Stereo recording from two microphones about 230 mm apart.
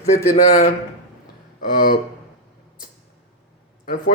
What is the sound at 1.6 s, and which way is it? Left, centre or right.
Speech, left.